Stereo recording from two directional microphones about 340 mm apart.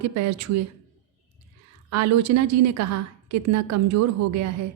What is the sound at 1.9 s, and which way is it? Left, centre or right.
A woman's voice, right.